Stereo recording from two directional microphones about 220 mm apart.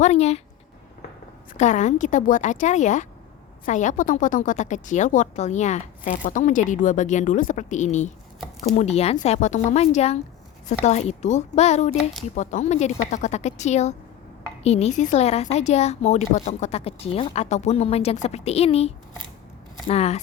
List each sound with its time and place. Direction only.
0.0 s speech: 30° left (ahead or behind)
1.5 s speech: 35° left (ahead or behind)